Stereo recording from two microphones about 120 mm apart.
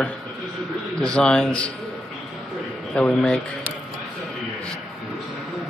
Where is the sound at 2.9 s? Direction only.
5° left (ahead or behind).